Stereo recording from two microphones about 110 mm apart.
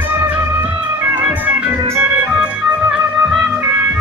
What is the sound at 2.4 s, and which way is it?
Music, 5° right (ahead or behind).